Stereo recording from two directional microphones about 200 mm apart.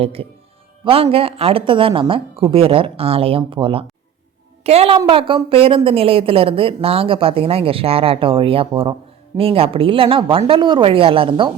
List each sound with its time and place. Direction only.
0.0 s a woman's voice: 30° right (ahead or behind)